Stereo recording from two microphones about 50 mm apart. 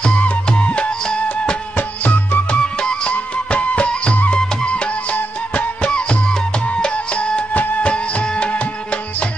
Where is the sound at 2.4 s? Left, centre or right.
Centre.